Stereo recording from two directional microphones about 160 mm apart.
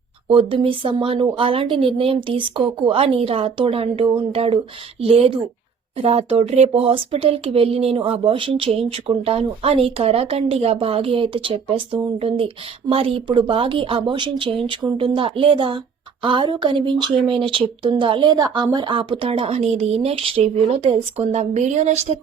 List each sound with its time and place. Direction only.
0.3 s a woman's voice: 35° right (ahead or behind)